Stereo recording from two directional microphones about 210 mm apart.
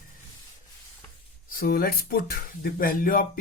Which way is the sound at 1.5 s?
45° left (ahead or behind).